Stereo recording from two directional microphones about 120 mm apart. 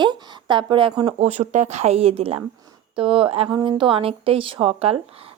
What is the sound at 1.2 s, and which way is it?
Speech, 70° right (ahead or behind).